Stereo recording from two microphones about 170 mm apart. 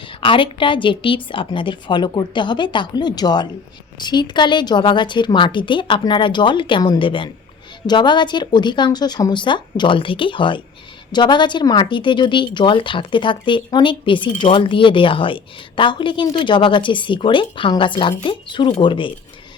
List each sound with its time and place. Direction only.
0.2 s speech: 30° left (ahead or behind)